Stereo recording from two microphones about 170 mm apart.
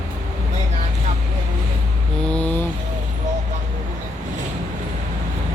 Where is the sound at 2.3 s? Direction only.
5° left (ahead or behind).